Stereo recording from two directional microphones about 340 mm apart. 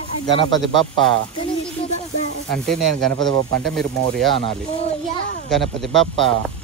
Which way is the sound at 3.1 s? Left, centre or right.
Right.